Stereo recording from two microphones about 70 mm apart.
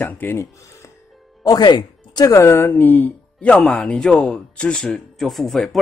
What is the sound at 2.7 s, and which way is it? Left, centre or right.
Speech, left.